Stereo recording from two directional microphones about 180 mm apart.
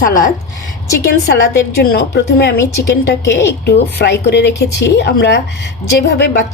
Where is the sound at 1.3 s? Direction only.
65° left (ahead or behind).